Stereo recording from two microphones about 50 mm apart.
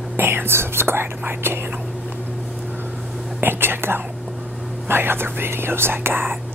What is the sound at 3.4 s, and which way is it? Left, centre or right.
Speech, right.